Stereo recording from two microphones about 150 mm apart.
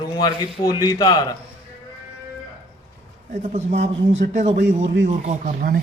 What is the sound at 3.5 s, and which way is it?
A man's voice, 50° right (ahead or behind).